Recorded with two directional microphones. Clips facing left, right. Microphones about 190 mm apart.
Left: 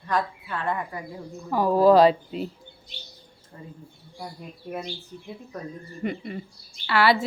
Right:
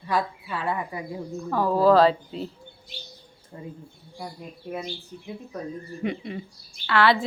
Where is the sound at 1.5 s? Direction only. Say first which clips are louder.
Left 2 dB; 15° left (ahead or behind).